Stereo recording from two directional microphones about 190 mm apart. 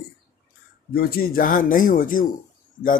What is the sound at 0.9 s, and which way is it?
Speech, 55° left (ahead or behind).